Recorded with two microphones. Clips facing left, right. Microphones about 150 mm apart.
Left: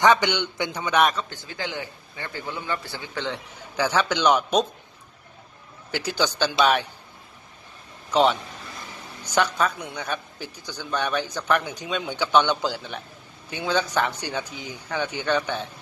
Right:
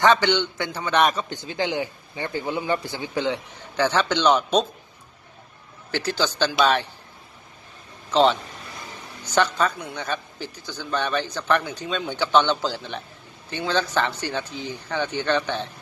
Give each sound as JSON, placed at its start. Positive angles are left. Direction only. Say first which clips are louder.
{"t": 0.0, "sound": "a man's voice", "louder": "right 1 dB", "side_deg": 15}
{"t": 1.1, "sound": "a man's voice", "louder": "right 3 dB", "side_deg": -20}
{"t": 3.8, "sound": "a man's voice", "louder": "right 1 dB", "side_deg": 10}
{"t": 5.9, "sound": "a man's voice", "louder": "right 1 dB", "side_deg": 10}
{"t": 8.1, "sound": "a man's voice", "louder": "right 1 dB", "side_deg": 10}